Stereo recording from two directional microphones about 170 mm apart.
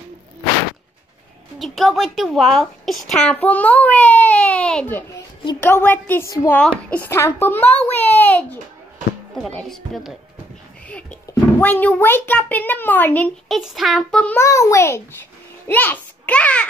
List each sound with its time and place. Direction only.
1.6 s speech: centre (ahead or behind)
10.9 s music: 5° left (ahead or behind)
11.6 s speech: 10° left (ahead or behind)
13.6 s speech: centre (ahead or behind)
14.4 s a child's voice: 15° left (ahead or behind)